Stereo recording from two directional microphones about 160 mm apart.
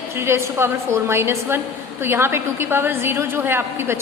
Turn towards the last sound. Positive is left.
turn(degrees=-15)  # may be behind; listen again after turning